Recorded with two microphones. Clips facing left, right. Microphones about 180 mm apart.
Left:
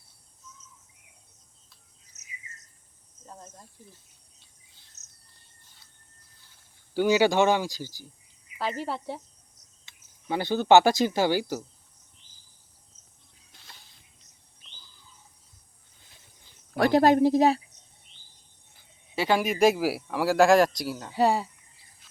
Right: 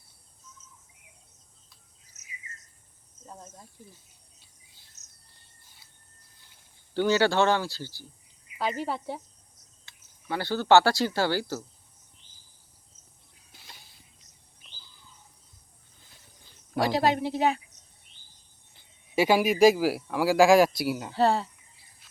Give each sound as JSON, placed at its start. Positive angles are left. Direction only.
{"t": 3.2, "sound": "speech", "side_deg": 0}
{"t": 5.0, "sound": "cricket", "side_deg": -30}
{"t": 6.9, "sound": "speech", "side_deg": 10}
{"t": 8.5, "sound": "speech", "side_deg": 0}
{"t": 9.8, "sound": "speech", "side_deg": 20}
{"t": 16.7, "sound": "speech", "side_deg": 55}
{"t": 19.1, "sound": "speech", "side_deg": -10}
{"t": 21.1, "sound": "speech", "side_deg": 10}